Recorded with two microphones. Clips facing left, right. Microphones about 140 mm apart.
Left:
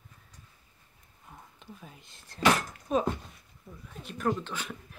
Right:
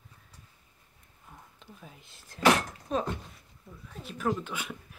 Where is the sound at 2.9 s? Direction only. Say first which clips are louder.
Left 3 dB; 10° left (ahead or behind).